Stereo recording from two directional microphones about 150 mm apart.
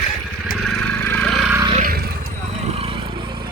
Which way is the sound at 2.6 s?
40° right (ahead or behind).